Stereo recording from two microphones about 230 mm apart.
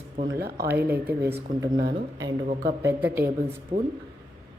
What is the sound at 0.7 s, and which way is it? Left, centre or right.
Speech, centre.